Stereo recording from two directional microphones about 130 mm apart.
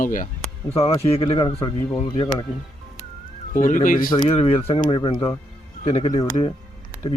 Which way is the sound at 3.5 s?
85° left.